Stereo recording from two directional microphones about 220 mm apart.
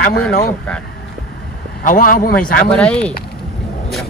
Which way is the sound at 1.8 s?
40° left (ahead or behind).